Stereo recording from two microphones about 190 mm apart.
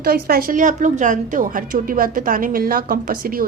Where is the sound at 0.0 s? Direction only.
55° right (ahead or behind).